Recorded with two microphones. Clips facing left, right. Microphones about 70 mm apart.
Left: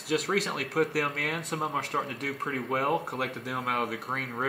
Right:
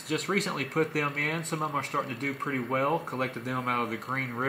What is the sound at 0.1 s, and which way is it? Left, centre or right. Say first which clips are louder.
Speech: left 1 dB; centre.